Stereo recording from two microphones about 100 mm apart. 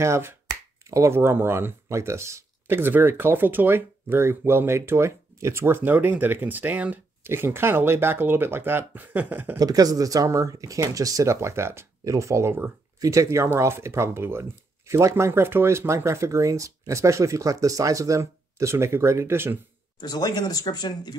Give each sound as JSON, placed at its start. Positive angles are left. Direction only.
{"t": 0.0, "sound": "speech", "side_deg": -25}
{"t": 9.6, "sound": "speech", "side_deg": -40}
{"t": 13.0, "sound": "speech", "side_deg": -35}
{"t": 20.0, "sound": "speech", "side_deg": 40}